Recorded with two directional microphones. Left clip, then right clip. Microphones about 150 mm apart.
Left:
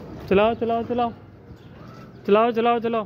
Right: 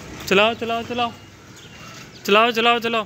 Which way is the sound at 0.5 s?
20° left (ahead or behind).